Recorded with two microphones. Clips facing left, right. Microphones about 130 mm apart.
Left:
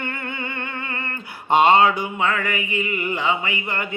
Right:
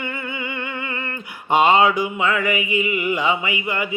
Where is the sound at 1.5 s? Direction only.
15° right (ahead or behind).